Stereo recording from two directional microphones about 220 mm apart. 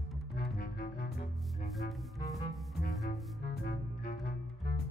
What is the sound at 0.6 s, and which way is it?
Music, 45° left (ahead or behind).